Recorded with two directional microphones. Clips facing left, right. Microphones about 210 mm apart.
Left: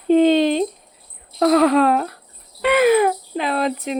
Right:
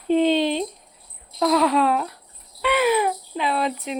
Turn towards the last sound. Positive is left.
turn(degrees=45)  # may be behind; listen again after turning